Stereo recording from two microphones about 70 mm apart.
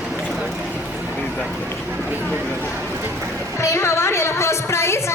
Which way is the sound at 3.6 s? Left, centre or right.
Left.